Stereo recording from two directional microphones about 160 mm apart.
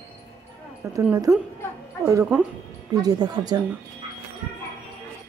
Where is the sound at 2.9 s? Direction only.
25° right (ahead or behind).